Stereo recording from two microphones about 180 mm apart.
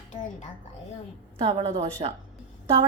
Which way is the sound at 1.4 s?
35° right (ahead or behind).